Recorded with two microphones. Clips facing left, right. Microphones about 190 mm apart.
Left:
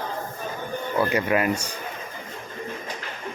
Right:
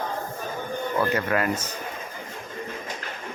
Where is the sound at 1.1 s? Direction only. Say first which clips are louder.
Left 2 dB; 15° left (ahead or behind).